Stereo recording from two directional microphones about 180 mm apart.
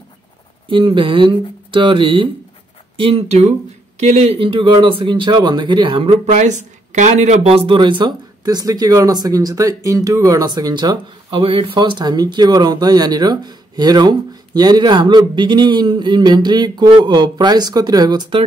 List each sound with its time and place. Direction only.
0.7 s speech: 30° right (ahead or behind)
6.2 s speech: 40° right (ahead or behind); by 18.4 s 25° right (ahead or behind)